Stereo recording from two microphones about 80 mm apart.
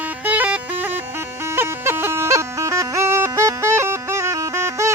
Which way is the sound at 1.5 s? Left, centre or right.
Right.